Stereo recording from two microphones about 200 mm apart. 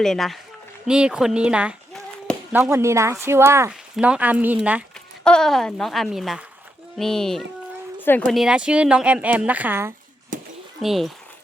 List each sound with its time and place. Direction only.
0.0 s speech: centre (ahead or behind)
5.2 s speech: 5° left (ahead or behind)
10.3 s a sound: 40° right (ahead or behind)
10.8 s speech: centre (ahead or behind)